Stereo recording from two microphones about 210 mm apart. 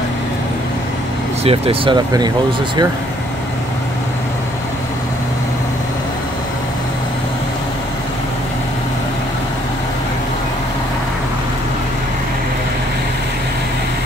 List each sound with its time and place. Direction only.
1.4 s speech: 25° right (ahead or behind)